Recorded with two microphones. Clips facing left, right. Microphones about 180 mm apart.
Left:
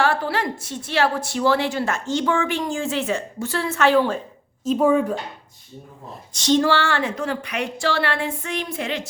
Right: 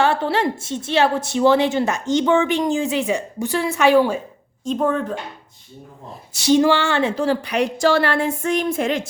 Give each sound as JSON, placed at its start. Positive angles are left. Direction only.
{"t": 0.0, "sound": "a woman's voice", "side_deg": -25}
{"t": 4.6, "sound": "speech", "side_deg": 5}
{"t": 6.1, "sound": "speech", "side_deg": -10}